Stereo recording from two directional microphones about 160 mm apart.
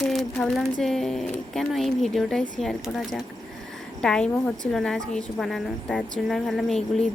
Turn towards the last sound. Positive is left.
turn(degrees=5)  # may be behind; listen again after turning